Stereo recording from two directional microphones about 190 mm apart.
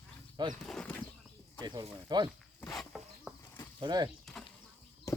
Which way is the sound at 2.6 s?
Centre (ahead or behind).